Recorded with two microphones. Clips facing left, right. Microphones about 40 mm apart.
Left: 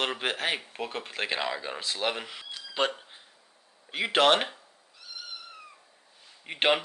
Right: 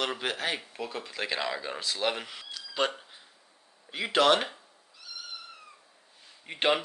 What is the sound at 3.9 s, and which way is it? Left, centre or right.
Speech, left.